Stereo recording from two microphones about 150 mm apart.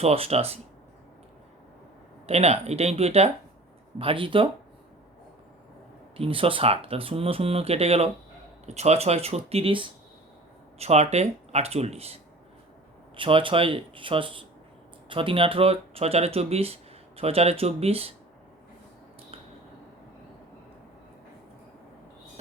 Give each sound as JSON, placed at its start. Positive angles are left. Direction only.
{"t": 0.0, "sound": "speech", "side_deg": -45}
{"t": 2.2, "sound": "speech", "side_deg": -45}
{"t": 6.1, "sound": "speech", "side_deg": -40}
{"t": 13.1, "sound": "speech", "side_deg": -35}